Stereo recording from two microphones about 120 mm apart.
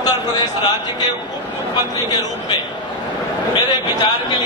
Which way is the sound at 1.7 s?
35° left (ahead or behind).